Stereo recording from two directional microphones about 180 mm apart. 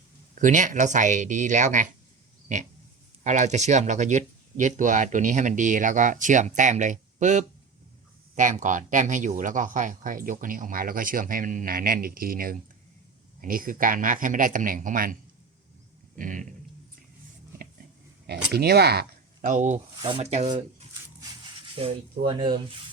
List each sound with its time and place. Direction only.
0.3 s speech: 45° right (ahead or behind)
3.2 s speech: 40° right (ahead or behind)
16.1 s a sound: 50° right (ahead or behind)
18.5 s speech: 60° right (ahead or behind)
19.5 s speech: 45° right (ahead or behind)
20.0 s speech: 30° right (ahead or behind)
21.8 s speech: 30° right (ahead or behind)